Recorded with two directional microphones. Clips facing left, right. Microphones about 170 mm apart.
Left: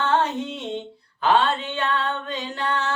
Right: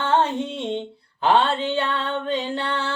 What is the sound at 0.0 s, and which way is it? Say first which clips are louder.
Female singing: right 1 dB; 30° right (ahead or behind).